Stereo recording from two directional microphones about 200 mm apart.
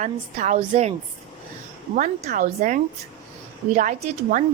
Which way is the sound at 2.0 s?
40° right (ahead or behind).